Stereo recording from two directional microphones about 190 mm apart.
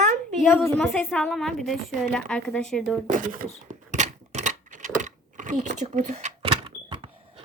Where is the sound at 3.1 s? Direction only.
45° right (ahead or behind).